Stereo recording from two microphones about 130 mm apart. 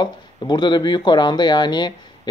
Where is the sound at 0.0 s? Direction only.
35° left (ahead or behind).